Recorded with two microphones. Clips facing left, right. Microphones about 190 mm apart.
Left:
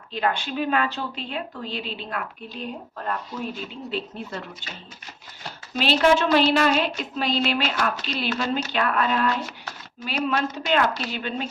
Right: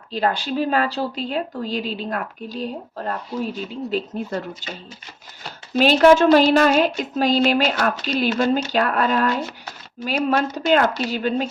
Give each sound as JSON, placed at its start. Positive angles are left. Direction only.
{"t": 0.1, "sound": "speech", "side_deg": -35}
{"t": 5.8, "sound": "a woman's voice", "side_deg": -45}